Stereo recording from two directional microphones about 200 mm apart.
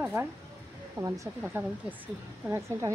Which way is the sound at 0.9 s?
15° right (ahead or behind).